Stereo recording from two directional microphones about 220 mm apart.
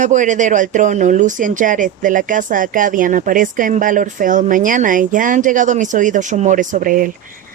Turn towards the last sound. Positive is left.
turn(degrees=-40)  # may be behind; listen again after turning